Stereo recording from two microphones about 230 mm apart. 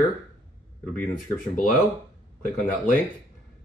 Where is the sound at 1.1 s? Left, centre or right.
Left.